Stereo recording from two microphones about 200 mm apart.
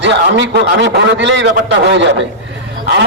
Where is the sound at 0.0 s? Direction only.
60° right (ahead or behind).